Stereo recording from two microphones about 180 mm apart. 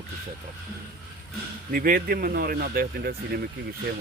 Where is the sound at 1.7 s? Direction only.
50° right (ahead or behind).